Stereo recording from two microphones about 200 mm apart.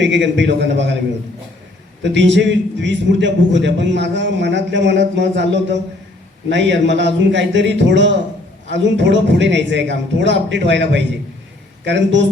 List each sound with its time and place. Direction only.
0.0 s a man's voice: 65° right (ahead or behind)
2.0 s a man's voice: 65° right (ahead or behind)